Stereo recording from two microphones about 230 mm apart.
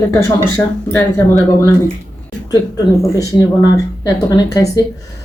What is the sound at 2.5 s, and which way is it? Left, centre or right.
Speech, centre.